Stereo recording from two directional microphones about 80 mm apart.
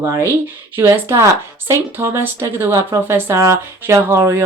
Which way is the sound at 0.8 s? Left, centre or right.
Right.